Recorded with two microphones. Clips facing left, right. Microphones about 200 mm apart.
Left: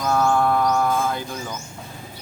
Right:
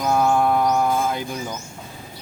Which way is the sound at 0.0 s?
15° right (ahead or behind).